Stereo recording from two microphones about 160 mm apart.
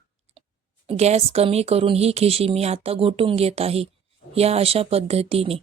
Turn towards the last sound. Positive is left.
turn(degrees=-35)  # may be behind; listen again after turning